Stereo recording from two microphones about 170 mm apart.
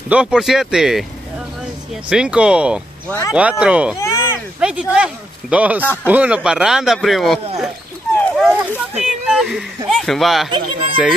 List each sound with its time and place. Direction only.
0.1 s speech: 5° right (ahead or behind)
3.1 s speech: 15° left (ahead or behind)
3.3 s speech: 10° right (ahead or behind)
4.0 s a sound: 15° left (ahead or behind)
4.6 s speech: 5° right (ahead or behind)
8.1 s a sound: 5° left (ahead or behind)
9.8 s speech: centre (ahead or behind)
10.5 s speech: 30° right (ahead or behind)